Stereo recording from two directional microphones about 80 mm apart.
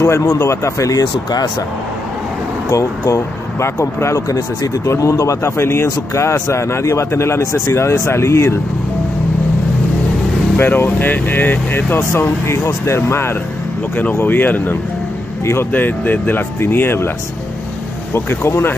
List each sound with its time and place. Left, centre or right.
0.0 s a man's voice: left
2.7 s a man's voice: left
10.6 s speech: left
18.1 s a man's voice: left